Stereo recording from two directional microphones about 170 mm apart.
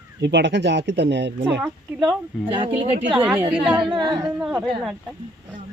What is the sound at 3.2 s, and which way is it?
Speech, 10° right (ahead or behind).